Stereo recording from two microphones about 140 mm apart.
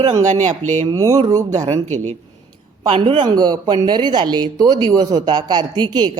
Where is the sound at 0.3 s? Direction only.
55° right (ahead or behind).